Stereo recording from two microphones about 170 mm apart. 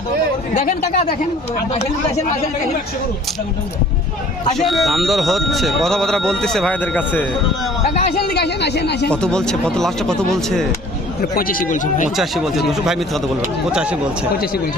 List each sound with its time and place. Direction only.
0.5 s speech: 45° left (ahead or behind)
4.5 s speech: centre (ahead or behind)
7.9 s a sound: 40° left (ahead or behind)
8.3 s a woman's voice: 75° left (ahead or behind)
9.0 s speech: 5° left (ahead or behind)
11.2 s speech: 55° left (ahead or behind)
12.1 s speech: centre (ahead or behind)